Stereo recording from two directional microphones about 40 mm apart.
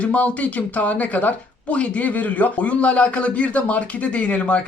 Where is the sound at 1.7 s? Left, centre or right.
Left.